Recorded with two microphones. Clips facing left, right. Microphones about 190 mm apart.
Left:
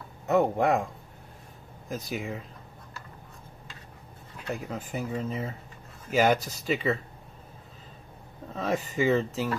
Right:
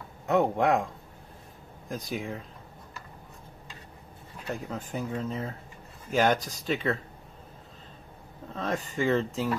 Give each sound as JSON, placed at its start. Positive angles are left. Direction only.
{"t": 0.3, "sound": "speech", "side_deg": 0}
{"t": 1.9, "sound": "speech", "side_deg": 5}
{"t": 4.5, "sound": "speech", "side_deg": 0}
{"t": 8.5, "sound": "speech", "side_deg": 5}